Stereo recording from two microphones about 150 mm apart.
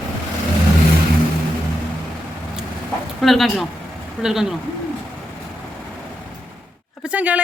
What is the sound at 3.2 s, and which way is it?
Speech, centre (ahead or behind).